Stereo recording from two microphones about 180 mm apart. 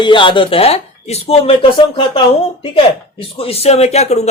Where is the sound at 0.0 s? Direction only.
25° left (ahead or behind).